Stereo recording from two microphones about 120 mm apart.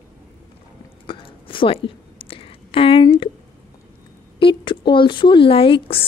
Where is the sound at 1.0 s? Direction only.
45° left (ahead or behind).